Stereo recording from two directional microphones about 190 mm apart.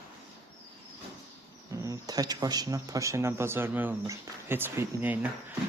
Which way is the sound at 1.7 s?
15° right (ahead or behind).